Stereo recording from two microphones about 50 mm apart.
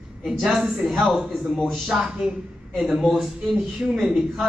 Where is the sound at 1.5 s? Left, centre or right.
Centre.